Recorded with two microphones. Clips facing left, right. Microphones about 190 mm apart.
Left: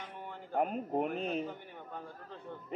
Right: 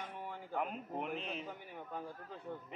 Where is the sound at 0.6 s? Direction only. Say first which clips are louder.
Left 8 dB; 45° left (ahead or behind).